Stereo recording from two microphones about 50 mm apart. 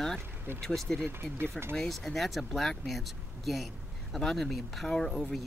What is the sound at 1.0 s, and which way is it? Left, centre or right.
Speech, right.